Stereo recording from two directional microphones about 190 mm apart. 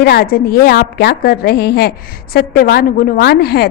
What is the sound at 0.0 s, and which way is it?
A woman's voice, 55° left (ahead or behind).